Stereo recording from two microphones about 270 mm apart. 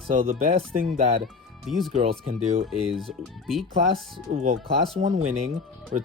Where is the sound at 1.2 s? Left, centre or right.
Centre.